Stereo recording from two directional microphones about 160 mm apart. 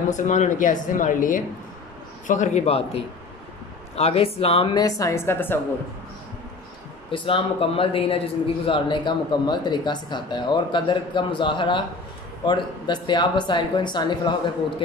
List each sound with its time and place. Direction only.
0.1 s a woman's voice: 50° left (ahead or behind)
4.7 s a woman's voice: 20° left (ahead or behind)
7.1 s speech: 35° left (ahead or behind)